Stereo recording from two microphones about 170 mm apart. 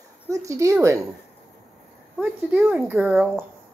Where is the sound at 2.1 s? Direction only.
5° right (ahead or behind).